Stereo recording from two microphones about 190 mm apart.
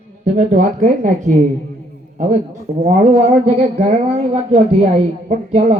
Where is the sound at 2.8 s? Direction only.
40° right (ahead or behind).